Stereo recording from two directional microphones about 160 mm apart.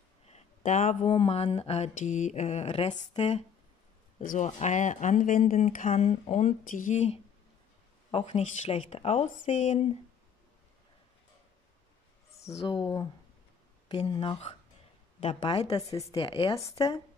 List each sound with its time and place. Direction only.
0.2 s a sound: 40° left (ahead or behind)
1.1 s speech: 35° left (ahead or behind)
4.2 s speech: 50° left (ahead or behind)
12.6 s speech: 30° left (ahead or behind)
15.9 s speech: 20° left (ahead or behind)